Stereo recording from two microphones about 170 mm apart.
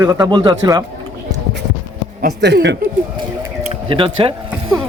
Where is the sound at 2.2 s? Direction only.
85° right.